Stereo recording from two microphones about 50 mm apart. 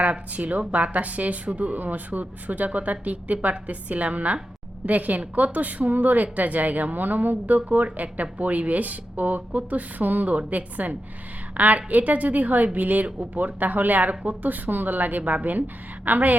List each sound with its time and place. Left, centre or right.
0.0 s a woman's voice: right